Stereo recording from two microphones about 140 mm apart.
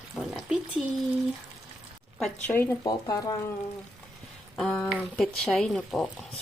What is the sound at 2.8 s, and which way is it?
Speech, 25° left (ahead or behind).